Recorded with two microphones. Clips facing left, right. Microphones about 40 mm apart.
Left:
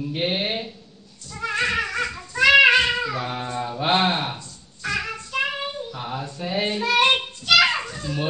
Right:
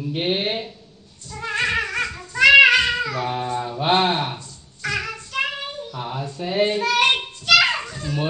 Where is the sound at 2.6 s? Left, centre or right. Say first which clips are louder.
Even; centre.